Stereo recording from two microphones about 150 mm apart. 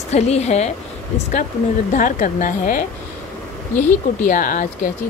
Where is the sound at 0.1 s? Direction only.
45° left (ahead or behind).